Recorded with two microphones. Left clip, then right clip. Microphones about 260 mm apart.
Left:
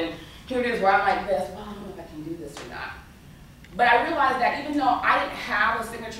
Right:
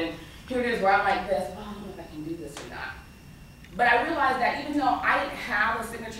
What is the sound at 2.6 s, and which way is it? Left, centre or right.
A woman's voice, centre.